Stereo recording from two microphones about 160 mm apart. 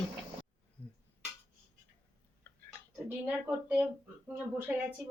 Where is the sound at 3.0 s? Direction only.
10° right (ahead or behind).